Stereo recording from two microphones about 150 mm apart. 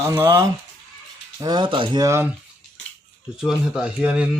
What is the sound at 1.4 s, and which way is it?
Speech, 30° right (ahead or behind).